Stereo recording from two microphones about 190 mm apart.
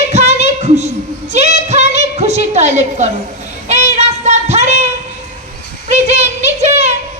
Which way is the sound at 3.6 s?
35° right (ahead or behind).